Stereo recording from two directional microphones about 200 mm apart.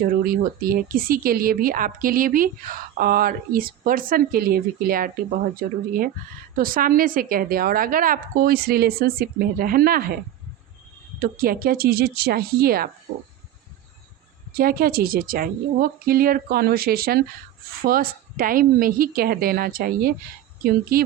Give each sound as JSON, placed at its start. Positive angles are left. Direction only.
{"t": 0.0, "sound": "speech", "side_deg": -45}
{"t": 11.2, "sound": "speech", "side_deg": -45}
{"t": 14.5, "sound": "speech", "side_deg": -50}